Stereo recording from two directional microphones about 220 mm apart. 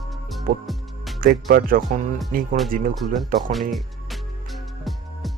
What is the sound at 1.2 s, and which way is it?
Speech, 40° right (ahead or behind).